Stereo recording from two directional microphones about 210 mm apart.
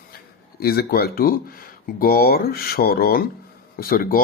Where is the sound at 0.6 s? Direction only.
45° left (ahead or behind).